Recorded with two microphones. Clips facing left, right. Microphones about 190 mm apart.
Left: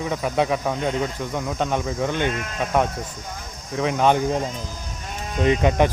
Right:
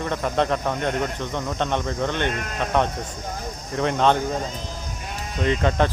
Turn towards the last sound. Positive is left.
turn(degrees=15)  # may be behind; listen again after turning